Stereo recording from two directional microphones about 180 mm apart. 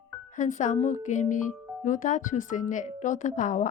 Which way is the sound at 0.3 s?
45° left (ahead or behind).